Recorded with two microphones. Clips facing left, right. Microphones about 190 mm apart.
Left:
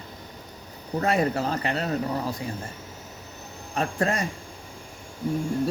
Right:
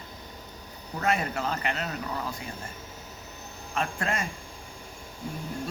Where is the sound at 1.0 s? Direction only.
35° left (ahead or behind).